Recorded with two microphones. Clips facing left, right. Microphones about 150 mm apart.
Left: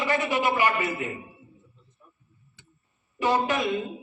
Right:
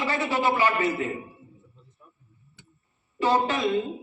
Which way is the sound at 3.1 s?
15° left (ahead or behind).